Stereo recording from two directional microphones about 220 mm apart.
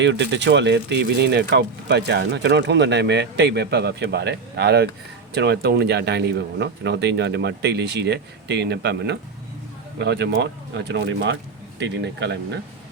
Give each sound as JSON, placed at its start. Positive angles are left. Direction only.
{"t": 0.0, "sound": "speech", "side_deg": -55}